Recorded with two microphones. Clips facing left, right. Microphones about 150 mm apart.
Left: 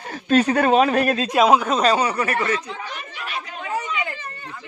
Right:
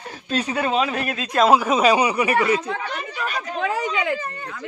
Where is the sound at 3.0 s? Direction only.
40° right (ahead or behind).